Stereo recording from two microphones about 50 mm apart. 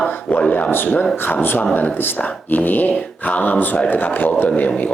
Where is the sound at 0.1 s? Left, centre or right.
Left.